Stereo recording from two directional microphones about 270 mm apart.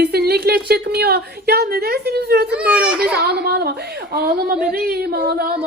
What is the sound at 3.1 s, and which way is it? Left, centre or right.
A woman's voice, right.